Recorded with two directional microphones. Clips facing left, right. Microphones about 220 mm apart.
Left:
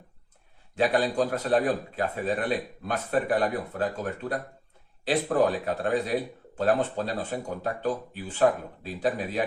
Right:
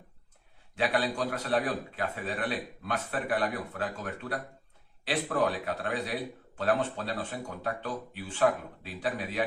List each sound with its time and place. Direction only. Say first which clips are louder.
0.8 s speech: left 5 dB; 40° left (ahead or behind)